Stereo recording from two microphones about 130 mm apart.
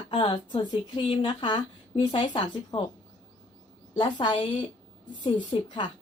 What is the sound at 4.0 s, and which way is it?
A woman's voice, 40° left (ahead or behind).